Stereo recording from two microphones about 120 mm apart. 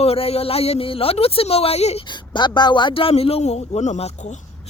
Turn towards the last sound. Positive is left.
turn(degrees=65)  # may be behind; listen again after turning